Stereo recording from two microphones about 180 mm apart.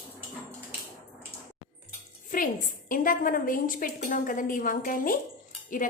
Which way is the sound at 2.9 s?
50° left (ahead or behind).